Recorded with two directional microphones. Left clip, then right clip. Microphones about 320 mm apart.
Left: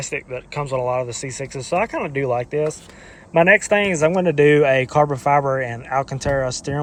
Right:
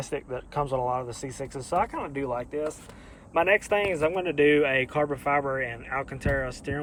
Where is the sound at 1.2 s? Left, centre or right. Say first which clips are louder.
Left 7 dB; right.